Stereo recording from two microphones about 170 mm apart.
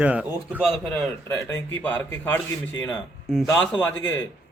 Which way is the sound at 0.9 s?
15° left (ahead or behind).